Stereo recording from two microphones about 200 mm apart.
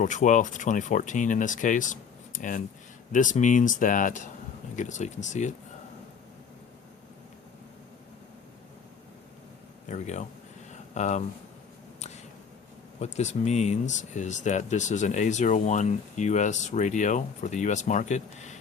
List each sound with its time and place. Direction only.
0.0 s speech: 40° left (ahead or behind)
9.9 s speech: 35° left (ahead or behind)
13.1 s speech: 35° left (ahead or behind)